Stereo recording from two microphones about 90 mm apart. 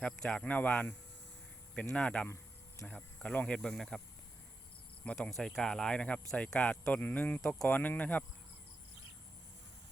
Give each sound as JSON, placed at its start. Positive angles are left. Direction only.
{"t": 0.0, "sound": "speech", "side_deg": 10}
{"t": 5.4, "sound": "speech", "side_deg": 5}